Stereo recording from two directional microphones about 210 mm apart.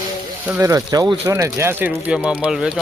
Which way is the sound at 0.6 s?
15° right (ahead or behind).